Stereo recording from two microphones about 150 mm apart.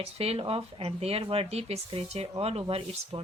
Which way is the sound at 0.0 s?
40° right (ahead or behind).